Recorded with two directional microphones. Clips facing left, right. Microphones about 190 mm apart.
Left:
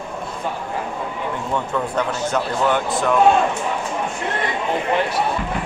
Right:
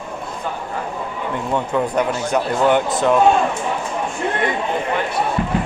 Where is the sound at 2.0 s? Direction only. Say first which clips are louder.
Right 2 dB; 15° right (ahead or behind).